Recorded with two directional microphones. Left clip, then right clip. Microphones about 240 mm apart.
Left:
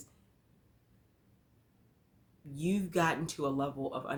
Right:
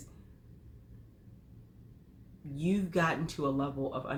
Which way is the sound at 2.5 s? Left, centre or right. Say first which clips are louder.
Right 1 dB; left.